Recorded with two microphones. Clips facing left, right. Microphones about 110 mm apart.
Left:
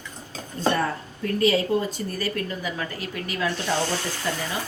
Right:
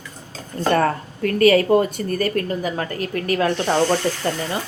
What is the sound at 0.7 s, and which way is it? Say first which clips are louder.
A woman's voice: right 7 dB; 70° right (ahead or behind).